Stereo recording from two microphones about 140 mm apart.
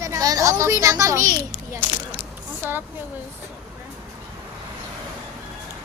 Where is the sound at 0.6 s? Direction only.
20° right (ahead or behind).